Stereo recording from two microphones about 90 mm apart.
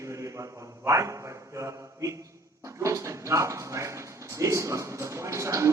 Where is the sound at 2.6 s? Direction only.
35° right (ahead or behind).